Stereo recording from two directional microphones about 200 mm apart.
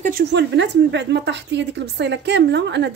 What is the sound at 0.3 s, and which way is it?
A woman's voice, 60° right (ahead or behind).